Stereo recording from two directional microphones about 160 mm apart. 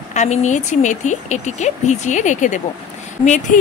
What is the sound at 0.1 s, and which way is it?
Speech, 45° left (ahead or behind).